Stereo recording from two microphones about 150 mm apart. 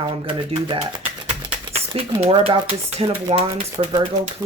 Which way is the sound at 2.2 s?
40° right (ahead or behind).